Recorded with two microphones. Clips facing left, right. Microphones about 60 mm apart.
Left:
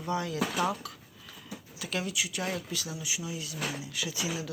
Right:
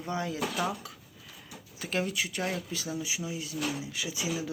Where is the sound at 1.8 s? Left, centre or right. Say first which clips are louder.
Right 2 dB; right.